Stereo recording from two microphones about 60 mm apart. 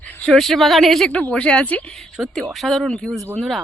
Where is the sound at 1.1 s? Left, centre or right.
Left.